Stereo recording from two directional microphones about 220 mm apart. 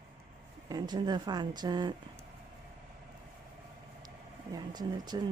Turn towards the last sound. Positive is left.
turn(degrees=-20)  # may be behind; listen again after turning